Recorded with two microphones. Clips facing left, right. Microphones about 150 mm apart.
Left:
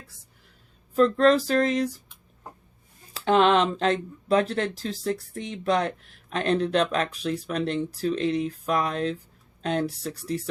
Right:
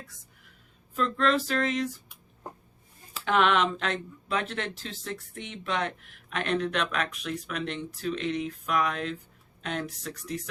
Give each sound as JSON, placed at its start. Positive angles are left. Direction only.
{"t": 0.9, "sound": "speech", "side_deg": 40}
{"t": 3.2, "sound": "speech", "side_deg": 30}